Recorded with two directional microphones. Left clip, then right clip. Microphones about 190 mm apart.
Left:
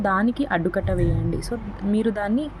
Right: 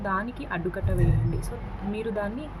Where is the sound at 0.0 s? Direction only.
35° left (ahead or behind).